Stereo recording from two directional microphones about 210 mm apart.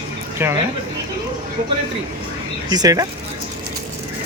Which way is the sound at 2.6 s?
20° right (ahead or behind).